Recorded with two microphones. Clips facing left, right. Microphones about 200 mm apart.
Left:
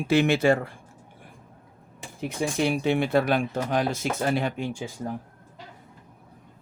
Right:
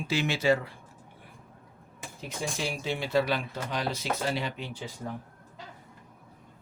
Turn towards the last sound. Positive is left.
turn(degrees=45)  # may be behind; listen again after turning